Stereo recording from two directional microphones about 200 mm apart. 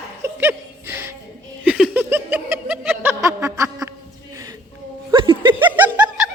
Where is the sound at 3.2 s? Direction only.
15° right (ahead or behind).